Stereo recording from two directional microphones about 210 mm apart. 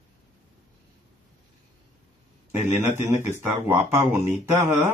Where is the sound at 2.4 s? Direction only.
10° right (ahead or behind).